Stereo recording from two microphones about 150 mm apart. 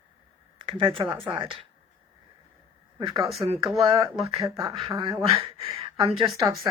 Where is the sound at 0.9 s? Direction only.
35° right (ahead or behind).